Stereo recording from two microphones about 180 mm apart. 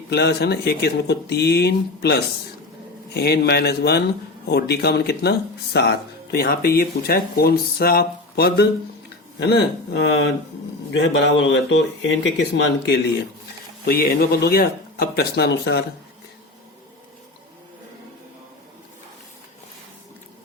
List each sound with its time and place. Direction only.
0.1 s speech: 65° left (ahead or behind)
10.9 s speech: 85° left; by 13.0 s 70° left (ahead or behind)
13.8 s speech: 55° left (ahead or behind)